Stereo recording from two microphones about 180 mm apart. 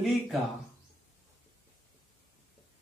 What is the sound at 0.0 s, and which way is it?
Speech, centre (ahead or behind).